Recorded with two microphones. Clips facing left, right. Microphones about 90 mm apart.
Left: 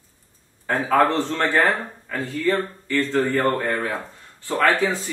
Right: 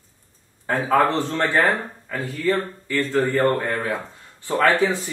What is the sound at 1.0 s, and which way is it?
Speech, 15° right (ahead or behind).